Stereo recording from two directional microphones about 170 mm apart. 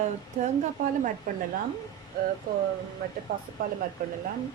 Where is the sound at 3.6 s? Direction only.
60° right (ahead or behind).